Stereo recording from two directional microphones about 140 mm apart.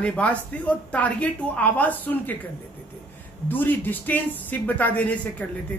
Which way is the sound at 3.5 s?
15° left (ahead or behind).